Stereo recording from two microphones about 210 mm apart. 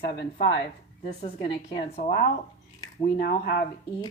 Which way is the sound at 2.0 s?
45° left (ahead or behind).